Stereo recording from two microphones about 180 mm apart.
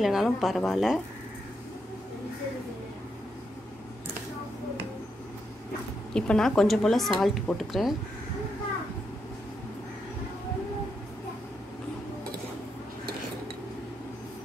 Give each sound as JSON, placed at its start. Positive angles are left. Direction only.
{"t": 0.0, "sound": "speech", "side_deg": 0}
{"t": 6.1, "sound": "speech", "side_deg": 5}